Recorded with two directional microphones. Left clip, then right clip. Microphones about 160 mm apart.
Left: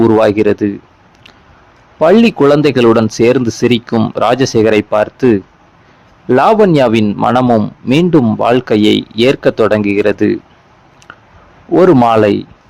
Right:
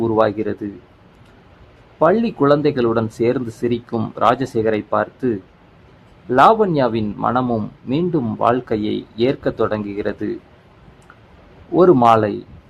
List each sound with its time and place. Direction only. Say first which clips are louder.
0.0 s a man's voice: left 8 dB; 40° left (ahead or behind)
2.0 s a man's voice: left 7 dB; 40° left (ahead or behind)
3.9 s speech: left 10 dB; 25° left (ahead or behind)
4.2 s a man's voice: left 5 dB; 40° left (ahead or behind)
6.3 s a man's voice: left 5 dB; 45° left (ahead or behind)
11.9 s a man's voice: left 5 dB; 40° left (ahead or behind)